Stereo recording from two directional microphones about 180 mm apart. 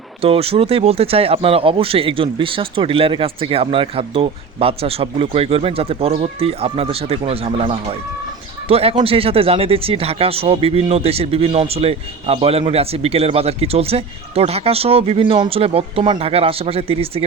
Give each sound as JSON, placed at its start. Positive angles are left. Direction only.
{"t": 0.2, "sound": "speech", "side_deg": -30}